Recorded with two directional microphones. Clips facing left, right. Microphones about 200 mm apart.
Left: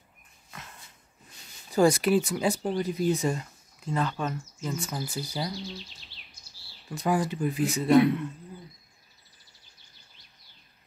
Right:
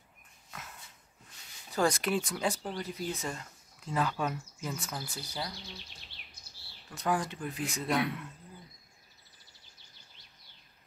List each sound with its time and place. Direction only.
0.5 s dog: 5° right (ahead or behind)
1.7 s speech: 10° left (ahead or behind)
3.8 s speech: 5° right (ahead or behind); by 5.5 s 10° left (ahead or behind)
5.9 s bird vocalization: 55° right (ahead or behind)
6.9 s speech: 10° left (ahead or behind)